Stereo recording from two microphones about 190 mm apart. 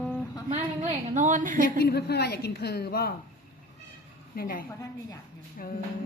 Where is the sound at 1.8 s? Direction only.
55° left (ahead or behind).